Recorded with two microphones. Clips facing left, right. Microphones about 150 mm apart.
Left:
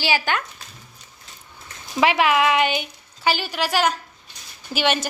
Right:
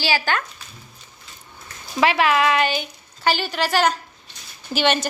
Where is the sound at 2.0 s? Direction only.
15° left (ahead or behind).